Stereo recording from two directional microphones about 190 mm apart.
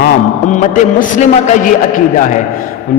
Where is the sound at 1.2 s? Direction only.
40° left (ahead or behind).